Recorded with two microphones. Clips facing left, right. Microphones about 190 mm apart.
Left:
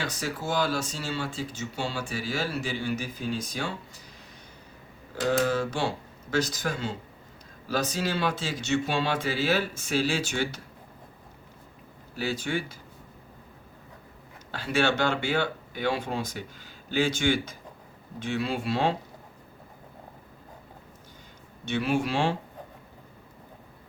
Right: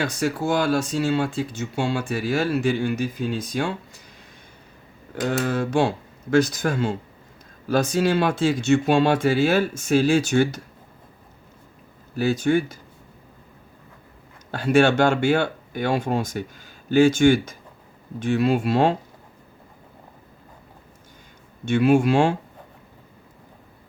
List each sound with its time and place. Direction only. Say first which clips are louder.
0.0 s speech: right 8 dB; 55° right (ahead or behind)
5.5 s speech: right 6 dB; 55° right (ahead or behind)
12.1 s speech: right 10 dB; 45° right (ahead or behind)
14.5 s speech: right 8 dB; 50° right (ahead or behind)
21.6 s speech: right 9 dB; 50° right (ahead or behind)